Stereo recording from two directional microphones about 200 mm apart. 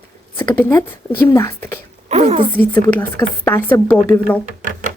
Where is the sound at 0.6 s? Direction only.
10° left (ahead or behind).